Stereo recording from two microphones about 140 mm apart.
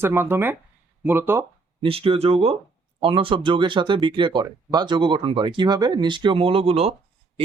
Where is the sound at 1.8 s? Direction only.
40° right (ahead or behind).